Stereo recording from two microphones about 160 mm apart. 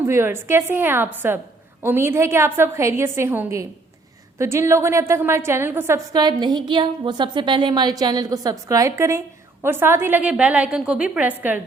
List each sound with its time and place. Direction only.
0.0 s a woman's voice: 15° right (ahead or behind)
6.1 s a woman's voice: 25° right (ahead or behind); by 11.6 s 10° right (ahead or behind)